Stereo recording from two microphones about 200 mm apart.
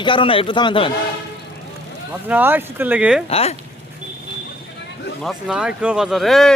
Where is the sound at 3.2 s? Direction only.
30° left (ahead or behind).